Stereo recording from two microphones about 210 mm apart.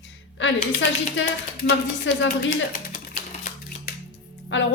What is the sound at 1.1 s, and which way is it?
Speech, 55° left (ahead or behind).